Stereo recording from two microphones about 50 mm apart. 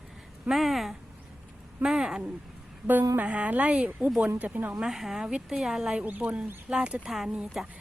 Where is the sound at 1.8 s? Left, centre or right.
Centre.